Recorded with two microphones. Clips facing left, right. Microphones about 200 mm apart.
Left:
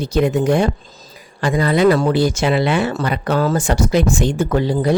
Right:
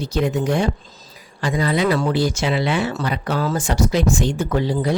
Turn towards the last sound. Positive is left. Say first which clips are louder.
# left 4 dB
turn(degrees=50)  # may be behind; listen again after turning